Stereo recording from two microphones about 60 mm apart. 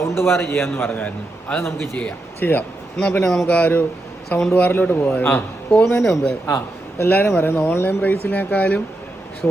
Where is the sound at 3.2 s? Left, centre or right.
Centre.